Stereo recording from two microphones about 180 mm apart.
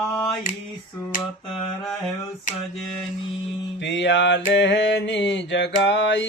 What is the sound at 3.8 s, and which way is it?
Mantra, 90° left.